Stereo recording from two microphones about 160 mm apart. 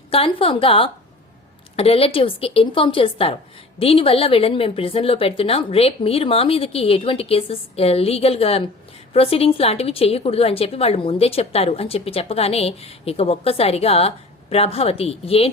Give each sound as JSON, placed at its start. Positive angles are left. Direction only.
{"t": 0.1, "sound": "a woman's voice", "side_deg": 35}